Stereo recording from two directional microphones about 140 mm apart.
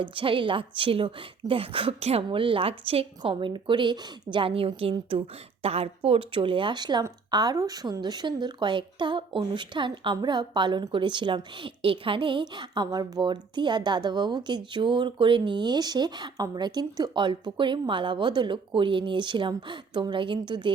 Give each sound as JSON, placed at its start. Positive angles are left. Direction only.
{"t": 0.0, "sound": "speech", "side_deg": -35}